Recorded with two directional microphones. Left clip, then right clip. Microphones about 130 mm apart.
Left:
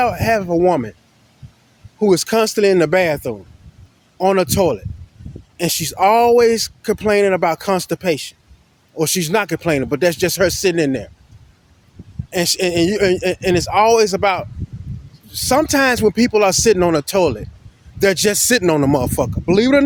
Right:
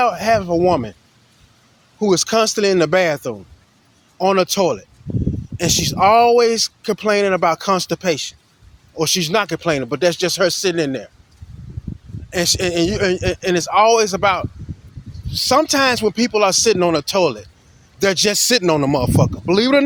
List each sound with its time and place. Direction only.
0.0 s speech: 50° left (ahead or behind)
2.0 s speech: 50° left (ahead or behind)
12.3 s speech: 55° left (ahead or behind)
19.5 s speech: 35° left (ahead or behind)